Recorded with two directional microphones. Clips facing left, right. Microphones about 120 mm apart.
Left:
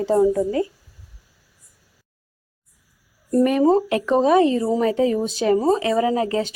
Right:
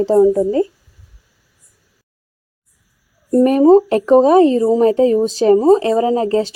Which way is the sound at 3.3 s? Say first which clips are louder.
Right 7 dB; 35° right (ahead or behind).